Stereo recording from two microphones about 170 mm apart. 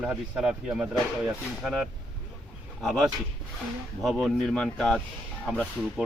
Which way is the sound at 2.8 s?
Centre (ahead or behind).